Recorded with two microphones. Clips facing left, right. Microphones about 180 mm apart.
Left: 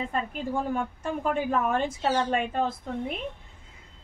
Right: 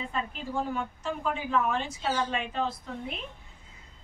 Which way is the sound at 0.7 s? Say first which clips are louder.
Left 3 dB; 50° left (ahead or behind).